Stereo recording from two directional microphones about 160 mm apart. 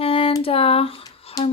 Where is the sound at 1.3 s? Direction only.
40° left (ahead or behind).